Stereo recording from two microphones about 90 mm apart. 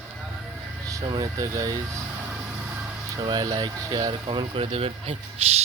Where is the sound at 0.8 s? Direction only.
40° right (ahead or behind).